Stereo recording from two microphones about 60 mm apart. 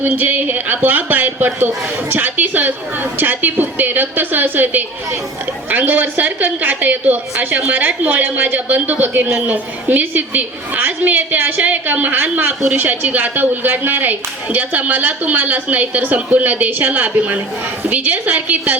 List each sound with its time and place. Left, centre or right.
0.1 s a woman's voice: right